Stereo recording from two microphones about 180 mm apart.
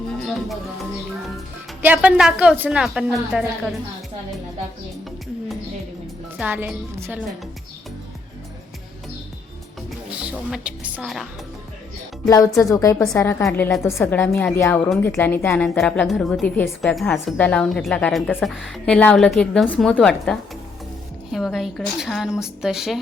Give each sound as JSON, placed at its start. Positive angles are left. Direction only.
{"t": 0.2, "sound": "music", "side_deg": 0}
{"t": 1.8, "sound": "a woman's voice", "side_deg": -10}
{"t": 6.3, "sound": "speech", "side_deg": -10}
{"t": 10.1, "sound": "a woman's voice", "side_deg": -5}
{"t": 12.5, "sound": "a woman's voice", "side_deg": 0}
{"t": 12.7, "sound": "a woman's voice", "side_deg": 20}